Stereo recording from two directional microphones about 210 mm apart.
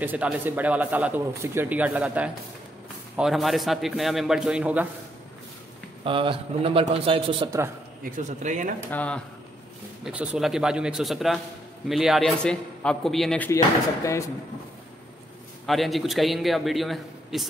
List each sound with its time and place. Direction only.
0.0 s a man's voice: 5° right (ahead or behind)
6.0 s a man's voice: 25° right (ahead or behind)
8.0 s speech: 35° right (ahead or behind)
8.9 s speech: 5° left (ahead or behind)
10.0 s a man's voice: 5° right (ahead or behind)
13.5 s speech: 15° left (ahead or behind)
15.6 s a man's voice: centre (ahead or behind)